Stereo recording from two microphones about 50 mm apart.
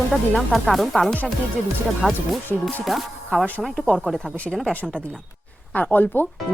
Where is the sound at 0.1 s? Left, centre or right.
Centre.